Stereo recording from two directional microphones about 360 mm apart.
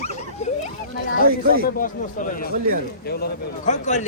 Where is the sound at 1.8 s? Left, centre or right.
Left.